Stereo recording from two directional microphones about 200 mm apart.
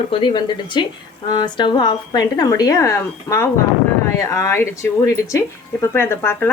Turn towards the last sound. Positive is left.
turn(degrees=10)  # may be behind; listen again after turning